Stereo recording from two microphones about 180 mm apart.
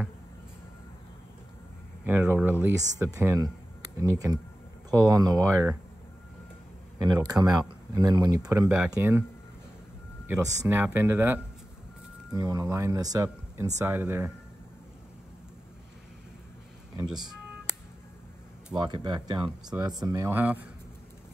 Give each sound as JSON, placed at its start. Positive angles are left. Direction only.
{"t": 2.0, "sound": "speech", "side_deg": -10}
{"t": 7.0, "sound": "speech", "side_deg": -20}
{"t": 10.2, "sound": "speech", "side_deg": -20}
{"t": 18.8, "sound": "speech", "side_deg": -25}